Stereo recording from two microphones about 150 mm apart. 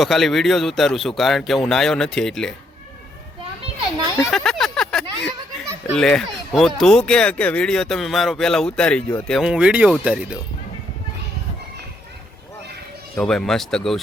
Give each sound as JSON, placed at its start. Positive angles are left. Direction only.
{"t": 0.0, "sound": "speech", "side_deg": 0}
{"t": 3.6, "sound": "children playing", "side_deg": -30}
{"t": 4.3, "sound": "a sound", "side_deg": 0}
{"t": 6.0, "sound": "speech", "side_deg": 5}
{"t": 9.5, "sound": "speech", "side_deg": -5}
{"t": 13.1, "sound": "speech", "side_deg": 5}